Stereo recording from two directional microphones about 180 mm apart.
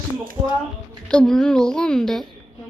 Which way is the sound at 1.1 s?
5° left (ahead or behind).